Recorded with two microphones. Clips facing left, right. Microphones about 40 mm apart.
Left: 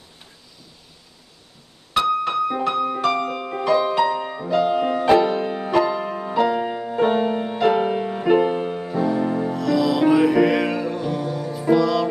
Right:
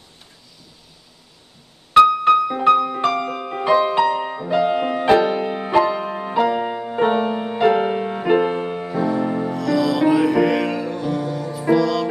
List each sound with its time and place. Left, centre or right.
2.0 s piano: right
2.6 s music: centre
3.8 s music: right
6.4 s music: centre
8.9 s music: centre